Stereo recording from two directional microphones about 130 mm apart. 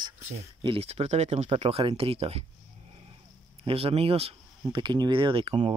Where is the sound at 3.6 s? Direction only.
50° right (ahead or behind).